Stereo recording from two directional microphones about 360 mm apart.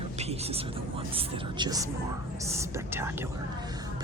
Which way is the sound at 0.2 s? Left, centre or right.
Centre.